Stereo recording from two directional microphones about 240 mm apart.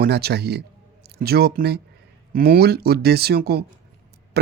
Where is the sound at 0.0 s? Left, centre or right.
Right.